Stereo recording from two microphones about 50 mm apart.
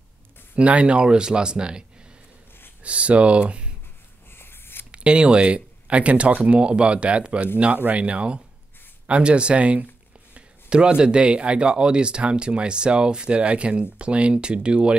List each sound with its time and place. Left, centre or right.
0.6 s speech: right
4.3 s a sound: left
4.9 s speech: centre